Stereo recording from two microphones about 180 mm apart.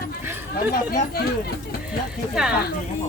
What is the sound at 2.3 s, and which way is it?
Speech, 5° right (ahead or behind).